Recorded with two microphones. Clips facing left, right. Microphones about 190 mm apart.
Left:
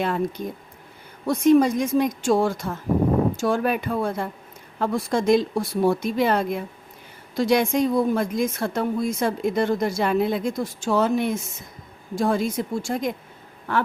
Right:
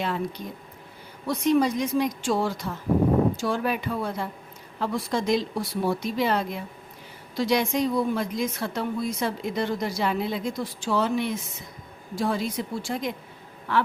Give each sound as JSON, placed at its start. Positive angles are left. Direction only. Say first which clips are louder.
{"t": 0.0, "sound": "speech", "louder": "left 4 dB", "side_deg": 50}